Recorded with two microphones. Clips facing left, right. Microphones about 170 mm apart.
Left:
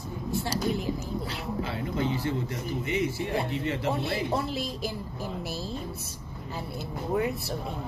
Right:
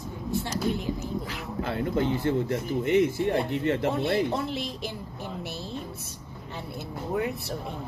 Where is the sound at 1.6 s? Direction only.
55° right (ahead or behind).